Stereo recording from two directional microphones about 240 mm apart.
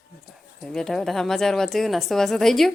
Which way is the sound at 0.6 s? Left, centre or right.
Centre.